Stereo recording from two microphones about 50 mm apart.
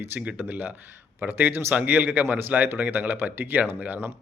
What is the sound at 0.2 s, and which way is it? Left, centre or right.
A man's voice, right.